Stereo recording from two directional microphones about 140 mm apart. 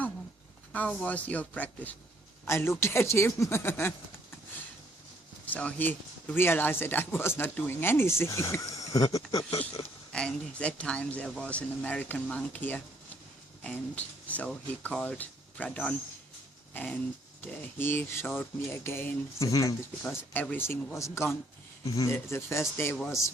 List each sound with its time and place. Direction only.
0.7 s speech: 10° left (ahead or behind)
5.5 s speech: 10° left (ahead or behind); by 9.5 s 25° left (ahead or behind)
9.5 s speech: 45° left (ahead or behind)
10.1 s speech: 5° left (ahead or behind)
14.3 s speech: 10° left (ahead or behind)
20.0 s speech: 10° left (ahead or behind)